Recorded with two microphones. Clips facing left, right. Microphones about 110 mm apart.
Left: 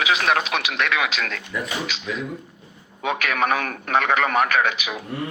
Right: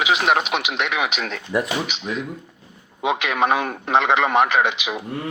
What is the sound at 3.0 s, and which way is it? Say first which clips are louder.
Speech: right 2 dB; 20° right (ahead or behind).